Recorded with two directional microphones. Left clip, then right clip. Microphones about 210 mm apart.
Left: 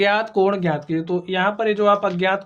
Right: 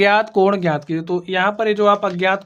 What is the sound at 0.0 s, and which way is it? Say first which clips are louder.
Speech: right 4 dB; 30° right (ahead or behind).